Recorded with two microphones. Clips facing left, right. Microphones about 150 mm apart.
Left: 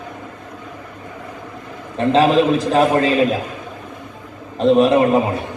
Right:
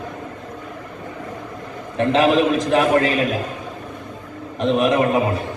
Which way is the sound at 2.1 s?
30° left (ahead or behind).